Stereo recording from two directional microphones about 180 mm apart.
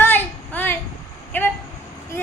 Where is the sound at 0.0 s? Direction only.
10° left (ahead or behind).